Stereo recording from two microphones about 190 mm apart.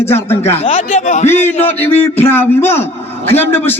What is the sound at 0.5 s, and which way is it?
Speech, 35° left (ahead or behind).